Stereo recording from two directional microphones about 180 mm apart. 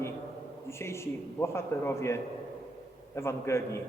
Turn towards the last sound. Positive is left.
turn(degrees=15)  # may be behind; listen again after turning